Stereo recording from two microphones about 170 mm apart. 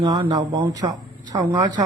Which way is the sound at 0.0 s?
20° right (ahead or behind).